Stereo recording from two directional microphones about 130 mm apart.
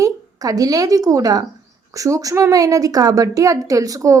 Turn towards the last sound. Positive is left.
turn(degrees=-25)  # may be behind; listen again after turning